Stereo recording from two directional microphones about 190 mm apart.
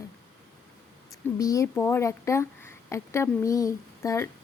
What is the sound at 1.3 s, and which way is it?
Speech, 15° left (ahead or behind).